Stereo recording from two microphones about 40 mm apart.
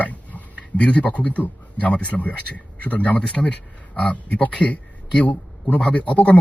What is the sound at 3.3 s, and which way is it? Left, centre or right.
A man's voice, left.